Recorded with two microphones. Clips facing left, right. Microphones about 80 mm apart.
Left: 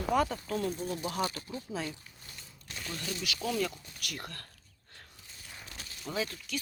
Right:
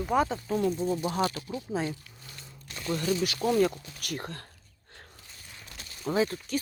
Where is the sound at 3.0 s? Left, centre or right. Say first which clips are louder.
Right 9 dB; right.